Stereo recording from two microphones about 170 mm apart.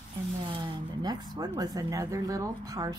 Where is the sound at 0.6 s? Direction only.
25° right (ahead or behind).